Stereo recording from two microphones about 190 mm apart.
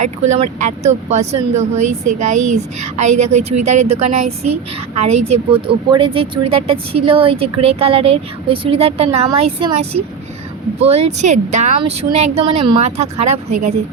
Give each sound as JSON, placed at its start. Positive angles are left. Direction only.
{"t": 0.0, "sound": "speech", "side_deg": -40}